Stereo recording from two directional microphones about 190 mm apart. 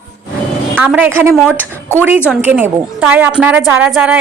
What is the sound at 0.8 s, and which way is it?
A woman's voice, 10° right (ahead or behind).